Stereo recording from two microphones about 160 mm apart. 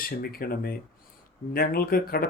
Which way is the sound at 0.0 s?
70° left (ahead or behind).